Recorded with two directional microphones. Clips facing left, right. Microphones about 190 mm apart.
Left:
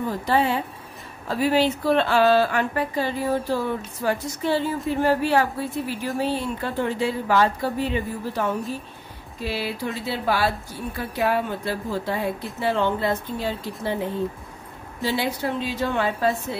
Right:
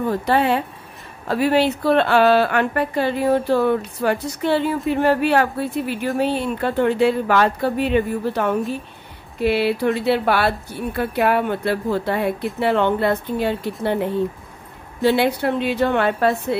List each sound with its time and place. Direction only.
0.1 s a woman's voice: 65° right (ahead or behind)
15.0 s a woman's voice: 65° right (ahead or behind)